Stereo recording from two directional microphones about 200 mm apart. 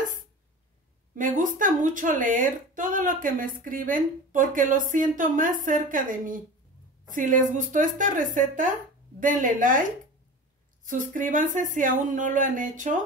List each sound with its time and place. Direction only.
1.1 s a woman's voice: 40° right (ahead or behind)